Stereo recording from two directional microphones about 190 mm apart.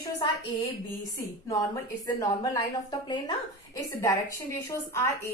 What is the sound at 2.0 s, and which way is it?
A woman's voice, 20° left (ahead or behind).